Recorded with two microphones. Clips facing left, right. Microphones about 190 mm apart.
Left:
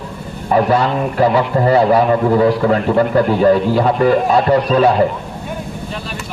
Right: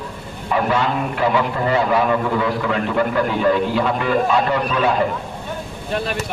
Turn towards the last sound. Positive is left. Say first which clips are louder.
# left 6 dB
turn(degrees=40)  # may be behind; listen again after turning